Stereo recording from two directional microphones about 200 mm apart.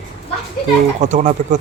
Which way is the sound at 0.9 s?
35° right (ahead or behind).